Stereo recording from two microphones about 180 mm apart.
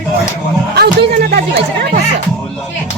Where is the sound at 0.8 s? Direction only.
60° right (ahead or behind).